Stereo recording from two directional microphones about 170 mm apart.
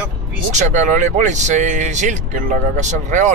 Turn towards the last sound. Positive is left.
turn(degrees=-45)  # may be behind; listen again after turning